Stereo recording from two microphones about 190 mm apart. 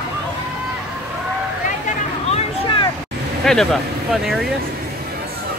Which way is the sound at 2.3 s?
25° left (ahead or behind).